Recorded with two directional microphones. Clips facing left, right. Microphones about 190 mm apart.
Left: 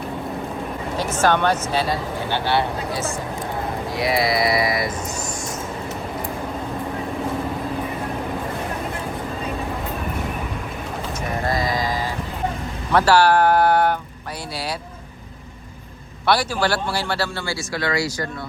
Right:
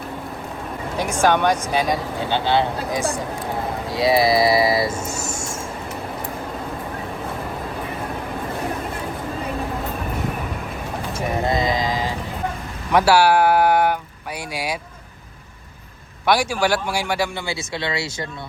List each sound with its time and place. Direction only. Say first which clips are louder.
0.9 s speech: right 1 dB; 10° right (ahead or behind)
11.4 s mantra: right 1 dB; 20° right (ahead or behind)
12.9 s speech: even; 10° right (ahead or behind)
16.2 s speech: right 1 dB; 10° right (ahead or behind)